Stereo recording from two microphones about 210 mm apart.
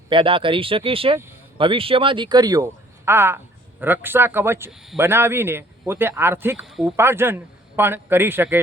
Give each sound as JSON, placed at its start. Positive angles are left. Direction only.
{"t": 0.1, "sound": "a man's voice", "side_deg": -25}